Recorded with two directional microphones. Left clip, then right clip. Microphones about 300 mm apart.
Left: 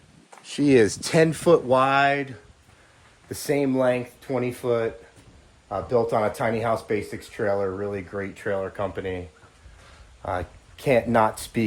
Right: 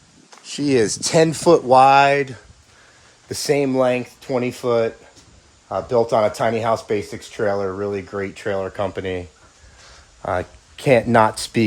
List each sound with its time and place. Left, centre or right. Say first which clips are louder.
0.4 s speech: even; centre; by 9.2 s right
10.2 s speech: right 6 dB; right